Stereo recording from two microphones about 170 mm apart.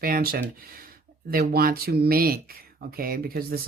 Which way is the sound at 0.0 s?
60° right (ahead or behind).